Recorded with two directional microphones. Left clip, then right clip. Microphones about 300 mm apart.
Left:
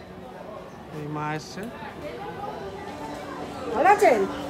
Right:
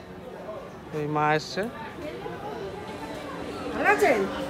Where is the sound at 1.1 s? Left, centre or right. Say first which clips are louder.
Right 7 dB; centre.